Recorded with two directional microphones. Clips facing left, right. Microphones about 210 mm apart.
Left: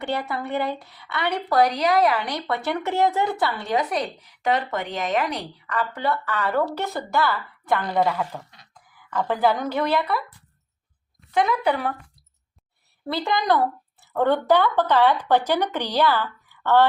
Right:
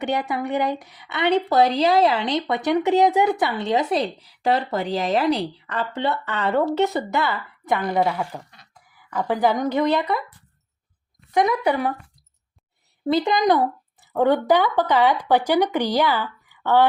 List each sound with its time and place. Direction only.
0.0 s a woman's voice: 20° right (ahead or behind)
11.3 s speech: 15° right (ahead or behind)
13.1 s speech: 20° right (ahead or behind)